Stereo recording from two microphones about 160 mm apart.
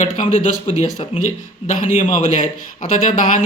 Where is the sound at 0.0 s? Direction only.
45° left (ahead or behind).